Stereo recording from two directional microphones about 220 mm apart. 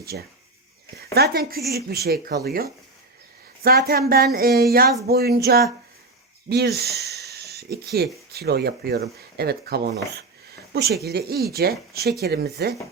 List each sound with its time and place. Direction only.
0.1 s speech: 45° right (ahead or behind)